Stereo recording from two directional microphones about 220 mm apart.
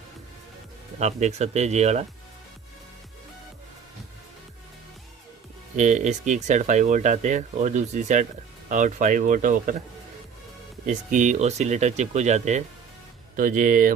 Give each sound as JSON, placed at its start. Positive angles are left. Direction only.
{"t": 0.9, "sound": "speech", "side_deg": -30}
{"t": 5.7, "sound": "speech", "side_deg": -35}
{"t": 10.8, "sound": "speech", "side_deg": -35}